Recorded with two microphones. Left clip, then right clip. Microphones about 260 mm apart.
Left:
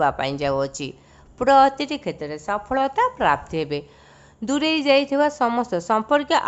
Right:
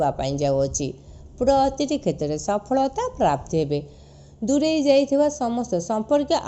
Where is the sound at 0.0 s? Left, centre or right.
Centre.